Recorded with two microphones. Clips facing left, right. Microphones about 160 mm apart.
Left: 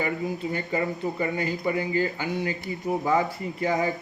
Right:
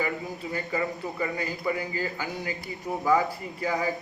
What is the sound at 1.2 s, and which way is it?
A man's voice, 30° left (ahead or behind).